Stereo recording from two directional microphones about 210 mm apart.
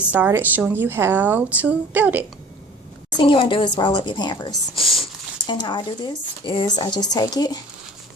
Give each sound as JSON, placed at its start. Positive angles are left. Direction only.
{"t": 0.1, "sound": "speech", "side_deg": -10}
{"t": 3.2, "sound": "speech", "side_deg": 25}